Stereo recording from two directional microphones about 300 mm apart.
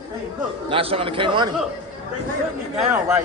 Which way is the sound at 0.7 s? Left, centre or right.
Centre.